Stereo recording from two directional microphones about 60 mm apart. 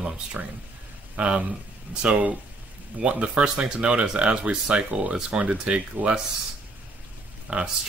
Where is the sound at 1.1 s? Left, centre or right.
Right.